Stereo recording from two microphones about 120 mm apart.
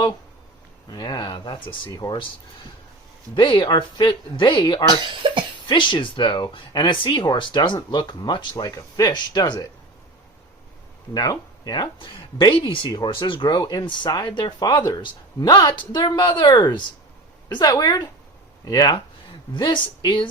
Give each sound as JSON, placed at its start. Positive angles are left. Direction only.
{"t": 0.9, "sound": "speech", "side_deg": 35}
{"t": 3.3, "sound": "speech", "side_deg": 40}
{"t": 4.9, "sound": "speech", "side_deg": -40}
{"t": 5.6, "sound": "speech", "side_deg": 40}
{"t": 11.1, "sound": "speech", "side_deg": 35}